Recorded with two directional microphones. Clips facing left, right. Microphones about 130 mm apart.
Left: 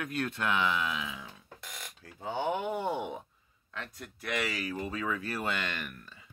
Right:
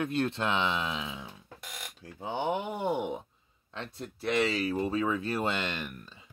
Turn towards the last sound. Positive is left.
turn(degrees=-20)  # may be behind; listen again after turning